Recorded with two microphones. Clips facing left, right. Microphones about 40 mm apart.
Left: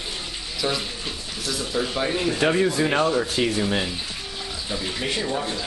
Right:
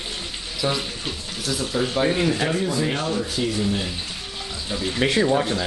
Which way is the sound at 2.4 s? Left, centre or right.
Left.